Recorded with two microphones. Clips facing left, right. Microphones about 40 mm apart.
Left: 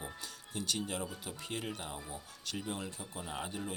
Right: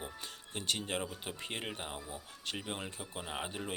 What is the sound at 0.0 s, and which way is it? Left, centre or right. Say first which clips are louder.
Music: even; right.